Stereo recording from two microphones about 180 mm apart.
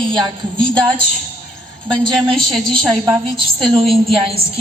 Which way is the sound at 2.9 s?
15° right (ahead or behind).